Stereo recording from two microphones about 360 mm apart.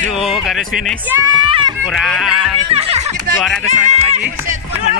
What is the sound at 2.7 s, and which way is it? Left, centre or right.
Speech, centre.